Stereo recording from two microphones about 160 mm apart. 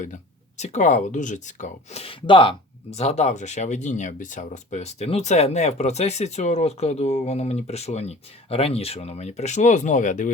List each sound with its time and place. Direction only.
0.0 s speech: 50° left (ahead or behind)